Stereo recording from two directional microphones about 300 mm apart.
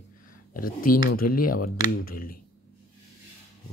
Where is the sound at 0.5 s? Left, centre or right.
Left.